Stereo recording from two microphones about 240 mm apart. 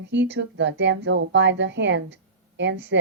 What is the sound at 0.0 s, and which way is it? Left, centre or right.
A woman's voice, right.